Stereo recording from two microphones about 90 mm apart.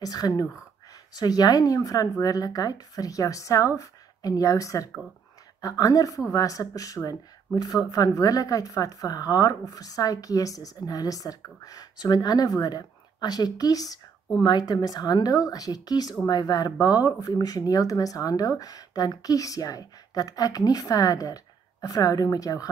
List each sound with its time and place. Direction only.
0.0 s speech: 45° left (ahead or behind)